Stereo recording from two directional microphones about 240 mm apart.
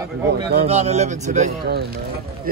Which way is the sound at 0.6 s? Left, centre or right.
Right.